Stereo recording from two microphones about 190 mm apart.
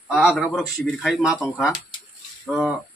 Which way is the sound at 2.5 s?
Centre (ahead or behind).